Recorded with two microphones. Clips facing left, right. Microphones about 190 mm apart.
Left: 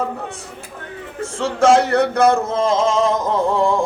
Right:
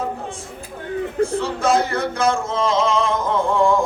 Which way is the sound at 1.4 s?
85° left.